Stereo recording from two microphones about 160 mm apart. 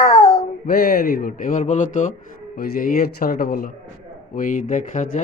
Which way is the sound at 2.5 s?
65° left (ahead or behind).